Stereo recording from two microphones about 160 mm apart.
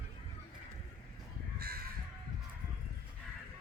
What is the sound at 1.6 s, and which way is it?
Crow, 70° right (ahead or behind).